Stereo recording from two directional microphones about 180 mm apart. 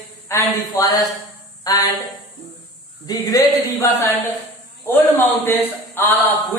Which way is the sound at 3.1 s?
20° left (ahead or behind).